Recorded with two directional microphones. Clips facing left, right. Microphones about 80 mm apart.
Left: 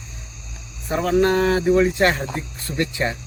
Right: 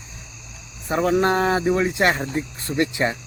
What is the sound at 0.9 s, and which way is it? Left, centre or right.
Speech, right.